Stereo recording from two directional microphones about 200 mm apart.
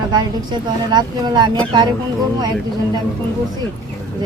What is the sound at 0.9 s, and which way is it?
Speech, 20° right (ahead or behind).